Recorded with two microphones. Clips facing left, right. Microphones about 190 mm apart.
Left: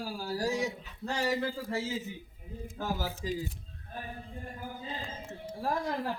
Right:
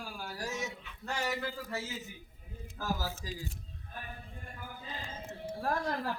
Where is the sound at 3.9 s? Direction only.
30° left (ahead or behind).